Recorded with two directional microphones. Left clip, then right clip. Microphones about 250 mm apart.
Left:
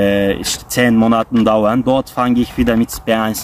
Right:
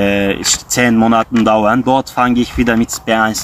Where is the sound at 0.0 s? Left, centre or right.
Centre.